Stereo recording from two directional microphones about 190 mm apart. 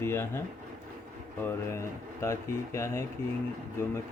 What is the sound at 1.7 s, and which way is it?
Speech, 15° left (ahead or behind).